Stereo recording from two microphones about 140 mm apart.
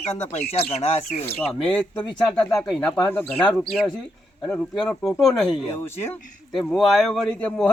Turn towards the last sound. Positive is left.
turn(degrees=10)  # may be behind; listen again after turning